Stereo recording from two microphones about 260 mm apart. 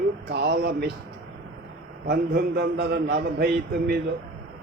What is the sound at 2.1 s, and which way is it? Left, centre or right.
A man's voice, right.